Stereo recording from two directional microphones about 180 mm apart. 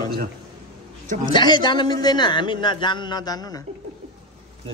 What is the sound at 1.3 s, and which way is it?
A man's voice, 25° left (ahead or behind).